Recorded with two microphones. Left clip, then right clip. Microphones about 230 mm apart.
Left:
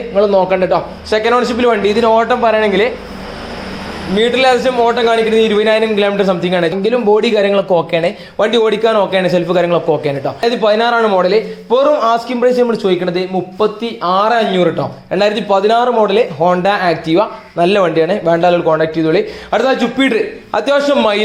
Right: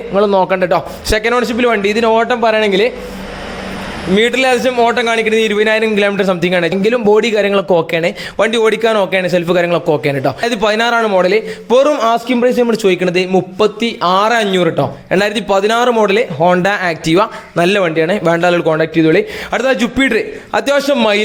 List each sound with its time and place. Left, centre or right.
0.1 s a man's voice: right
4.1 s a man's voice: right
18.2 s a man's voice: right
19.5 s a man's voice: right